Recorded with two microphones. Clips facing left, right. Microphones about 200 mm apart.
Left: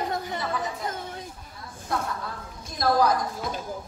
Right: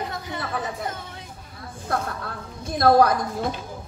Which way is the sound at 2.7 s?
60° right (ahead or behind).